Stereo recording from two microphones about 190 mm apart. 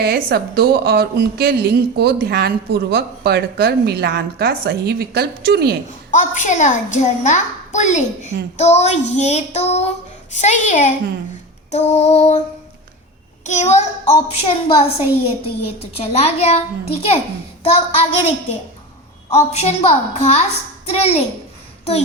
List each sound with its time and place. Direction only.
0.0 s a woman's voice: 55° right (ahead or behind)
6.1 s a child's voice: 40° left (ahead or behind)
13.4 s a child's voice: 35° left (ahead or behind)
19.3 s a child's voice: 35° left (ahead or behind)